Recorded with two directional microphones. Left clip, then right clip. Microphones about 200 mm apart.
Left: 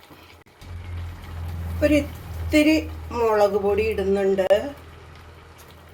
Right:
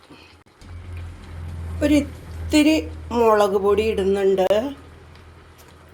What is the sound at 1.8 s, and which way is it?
Speech, 35° right (ahead or behind).